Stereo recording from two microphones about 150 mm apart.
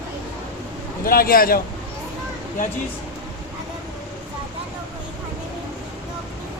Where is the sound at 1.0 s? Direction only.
75° left (ahead or behind).